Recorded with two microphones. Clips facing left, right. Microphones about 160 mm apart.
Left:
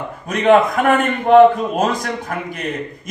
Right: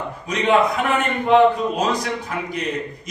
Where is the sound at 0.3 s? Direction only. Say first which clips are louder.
Left 5 dB; 50° left (ahead or behind).